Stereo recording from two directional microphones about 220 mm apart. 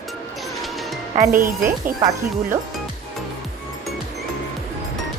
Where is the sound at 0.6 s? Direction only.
Centre (ahead or behind).